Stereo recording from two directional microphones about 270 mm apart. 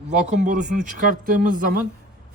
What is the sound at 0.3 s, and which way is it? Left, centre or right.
A man's voice, right.